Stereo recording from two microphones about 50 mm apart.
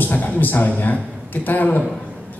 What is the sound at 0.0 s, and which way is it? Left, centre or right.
A man's voice, left.